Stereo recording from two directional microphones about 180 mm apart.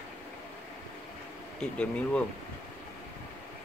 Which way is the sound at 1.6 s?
5° left (ahead or behind).